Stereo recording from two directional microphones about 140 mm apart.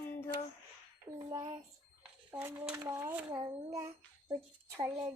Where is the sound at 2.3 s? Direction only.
20° right (ahead or behind).